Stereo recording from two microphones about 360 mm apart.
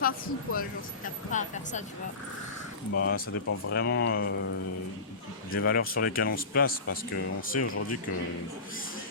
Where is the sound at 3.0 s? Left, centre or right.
Left.